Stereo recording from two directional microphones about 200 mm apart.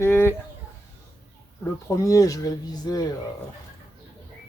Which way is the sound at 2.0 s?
15° left (ahead or behind).